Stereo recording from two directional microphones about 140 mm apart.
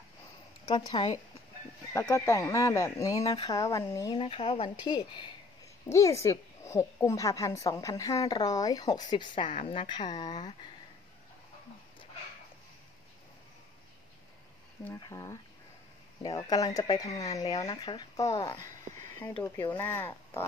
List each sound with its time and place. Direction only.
0.7 s speech: 30° left (ahead or behind)
2.0 s a woman's voice: 20° left (ahead or behind)
4.1 s speech: 40° left (ahead or behind)
5.9 s a woman's voice: 20° left (ahead or behind)
15.0 s a woman's voice: 25° left (ahead or behind)
18.6 s a sound: 60° right (ahead or behind)
19.7 s speech: 15° left (ahead or behind)